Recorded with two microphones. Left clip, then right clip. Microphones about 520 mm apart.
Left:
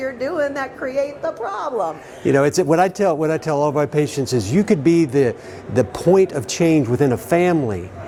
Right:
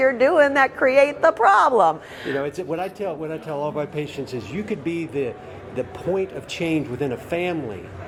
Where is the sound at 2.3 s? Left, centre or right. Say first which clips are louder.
Left 11 dB; left.